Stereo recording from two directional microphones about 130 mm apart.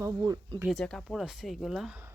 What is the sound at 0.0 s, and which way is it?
Speech, 30° right (ahead or behind).